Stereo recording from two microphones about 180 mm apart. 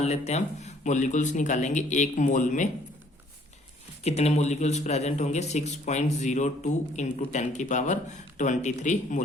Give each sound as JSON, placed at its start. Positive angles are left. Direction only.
{"t": 0.0, "sound": "speech", "side_deg": 35}
{"t": 4.0, "sound": "speech", "side_deg": 35}